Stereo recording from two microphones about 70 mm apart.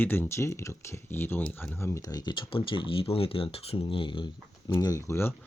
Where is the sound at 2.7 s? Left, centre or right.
Left.